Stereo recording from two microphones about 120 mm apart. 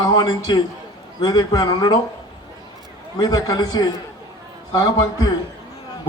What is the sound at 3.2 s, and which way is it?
A man's voice, 35° left (ahead or behind).